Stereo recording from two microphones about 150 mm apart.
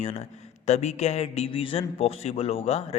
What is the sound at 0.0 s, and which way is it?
A man's voice, 50° left (ahead or behind).